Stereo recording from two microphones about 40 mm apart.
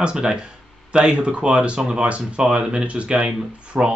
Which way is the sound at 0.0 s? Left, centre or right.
Right.